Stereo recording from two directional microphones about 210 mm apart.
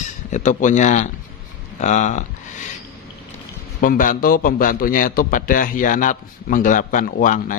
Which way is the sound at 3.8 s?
40° left (ahead or behind).